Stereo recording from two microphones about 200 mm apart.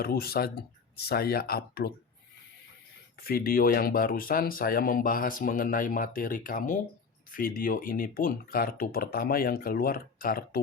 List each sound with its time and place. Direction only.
0.0 s speech: 50° left (ahead or behind)
3.2 s speech: 50° left (ahead or behind)